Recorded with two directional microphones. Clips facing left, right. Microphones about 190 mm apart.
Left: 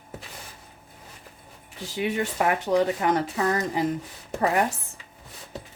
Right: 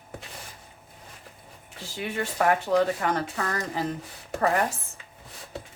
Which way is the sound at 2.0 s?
15° left (ahead or behind).